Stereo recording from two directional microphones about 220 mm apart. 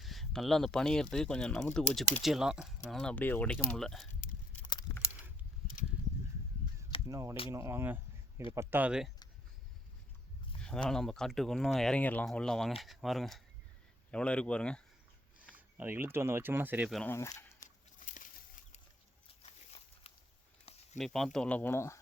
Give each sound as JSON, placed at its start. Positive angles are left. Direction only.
{"t": 0.0, "sound": "speech", "side_deg": 0}
{"t": 4.2, "sound": "a sound", "side_deg": 35}
{"t": 4.6, "sound": "a sound", "side_deg": 20}
{"t": 7.1, "sound": "speech", "side_deg": -15}
{"t": 10.6, "sound": "speech", "side_deg": 5}
{"t": 15.5, "sound": "speech", "side_deg": -10}
{"t": 17.0, "sound": "speech", "side_deg": 10}
{"t": 18.0, "sound": "chicken", "side_deg": 35}
{"t": 19.3, "sound": "a sound", "side_deg": 25}
{"t": 21.0, "sound": "speech", "side_deg": 0}